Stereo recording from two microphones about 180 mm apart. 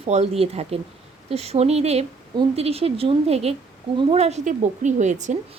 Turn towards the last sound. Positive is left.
turn(degrees=-40)  # may be behind; listen again after turning